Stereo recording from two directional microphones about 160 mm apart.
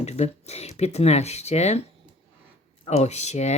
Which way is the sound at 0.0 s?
45° left (ahead or behind).